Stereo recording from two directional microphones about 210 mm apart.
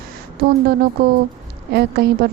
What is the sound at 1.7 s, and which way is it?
Speech, 50° right (ahead or behind).